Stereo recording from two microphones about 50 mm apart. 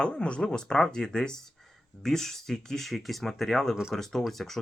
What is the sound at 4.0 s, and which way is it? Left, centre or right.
Speech, centre.